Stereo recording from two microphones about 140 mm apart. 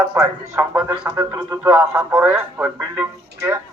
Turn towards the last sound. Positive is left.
turn(degrees=-15)  # may be behind; listen again after turning